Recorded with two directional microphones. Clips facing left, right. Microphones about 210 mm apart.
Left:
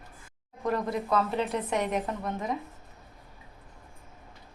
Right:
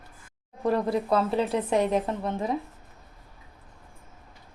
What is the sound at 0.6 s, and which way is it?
Speech, 30° right (ahead or behind).